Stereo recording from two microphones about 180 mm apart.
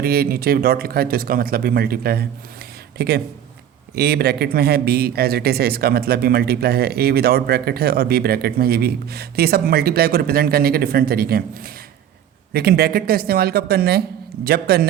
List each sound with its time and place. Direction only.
0.0 s speech: 55° right (ahead or behind)